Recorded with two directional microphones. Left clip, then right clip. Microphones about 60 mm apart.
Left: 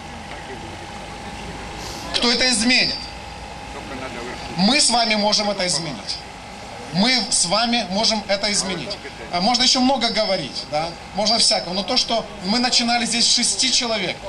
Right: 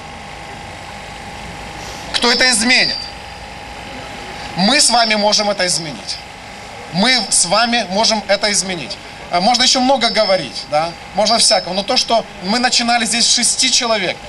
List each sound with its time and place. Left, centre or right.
2.1 s a man's voice: right
4.6 s a man's voice: right